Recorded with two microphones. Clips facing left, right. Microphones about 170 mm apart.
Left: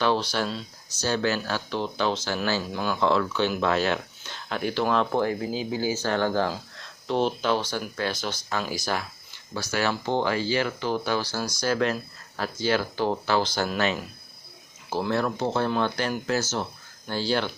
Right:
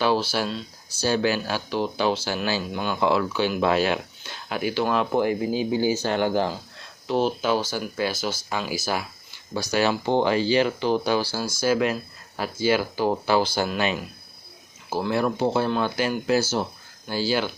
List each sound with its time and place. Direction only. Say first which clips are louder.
0.0 s speech: right 2 dB; 5° right (ahead or behind)
2.7 s speech: right 1 dB; centre (ahead or behind); by 6.5 s 15° right (ahead or behind)
7.1 s speech: right 2 dB; 5° right (ahead or behind)
9.7 s speech: right 4 dB; 20° right (ahead or behind)
14.8 s speech: right 2 dB; 5° right (ahead or behind)